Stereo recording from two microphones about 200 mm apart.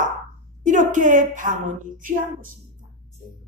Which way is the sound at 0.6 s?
40° right (ahead or behind).